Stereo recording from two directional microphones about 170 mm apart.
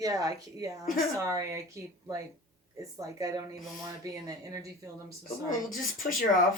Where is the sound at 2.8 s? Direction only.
20° right (ahead or behind).